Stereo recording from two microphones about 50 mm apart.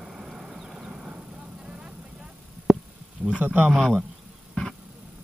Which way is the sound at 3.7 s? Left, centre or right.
Centre.